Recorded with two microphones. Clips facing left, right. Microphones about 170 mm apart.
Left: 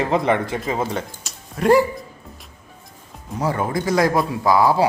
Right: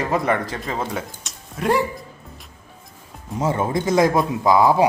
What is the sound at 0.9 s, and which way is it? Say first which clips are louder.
Speech: left 2 dB; centre (ahead or behind).